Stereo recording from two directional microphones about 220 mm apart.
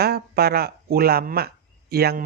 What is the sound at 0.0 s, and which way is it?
Speech, 45° right (ahead or behind).